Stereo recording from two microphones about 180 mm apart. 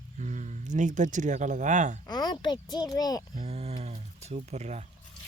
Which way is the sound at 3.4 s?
35° right (ahead or behind).